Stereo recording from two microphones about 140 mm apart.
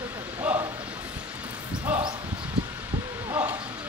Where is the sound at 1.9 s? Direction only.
10° right (ahead or behind).